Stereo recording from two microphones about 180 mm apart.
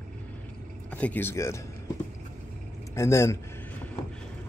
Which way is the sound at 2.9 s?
15° left (ahead or behind).